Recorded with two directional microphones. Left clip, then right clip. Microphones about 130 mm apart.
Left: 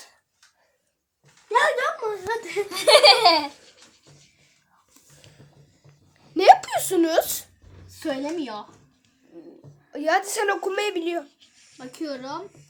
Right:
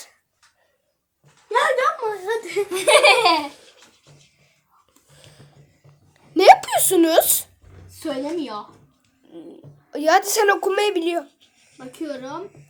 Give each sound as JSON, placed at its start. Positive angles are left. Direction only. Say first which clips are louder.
{"t": 1.5, "sound": "a sound", "louder": "right 2 dB", "side_deg": 15}
{"t": 2.6, "sound": "baby laughter", "louder": "even", "side_deg": 10}
{"t": 3.5, "sound": "babbling", "louder": "right 3 dB", "side_deg": -15}
{"t": 5.1, "sound": "a sound", "louder": "right 4 dB", "side_deg": -15}
{"t": 7.9, "sound": "a woman's voice", "louder": "right 2 dB", "side_deg": -5}
{"t": 9.3, "sound": "a woman's voice", "louder": "right 5 dB", "side_deg": -30}
{"t": 11.9, "sound": "speech", "louder": "right 2 dB", "side_deg": 0}